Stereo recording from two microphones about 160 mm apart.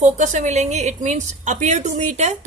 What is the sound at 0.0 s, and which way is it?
A woman's voice, 50° right (ahead or behind).